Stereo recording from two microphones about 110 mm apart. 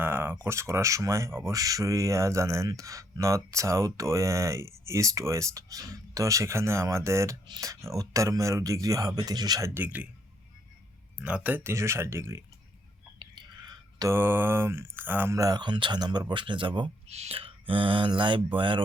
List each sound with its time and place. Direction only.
0.0 s speech: 15° right (ahead or behind)
9.8 s a man's voice: 15° right (ahead or behind)
11.2 s speech: 10° right (ahead or behind)
13.1 s whispering: 45° right (ahead or behind)
14.1 s speech: 20° right (ahead or behind)
15.4 s speech: 40° right (ahead or behind)
17.1 s speech: 70° right (ahead or behind); by 18.8 s 50° right (ahead or behind)